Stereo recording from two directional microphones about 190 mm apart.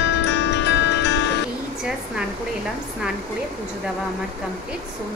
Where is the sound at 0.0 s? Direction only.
70° left (ahead or behind).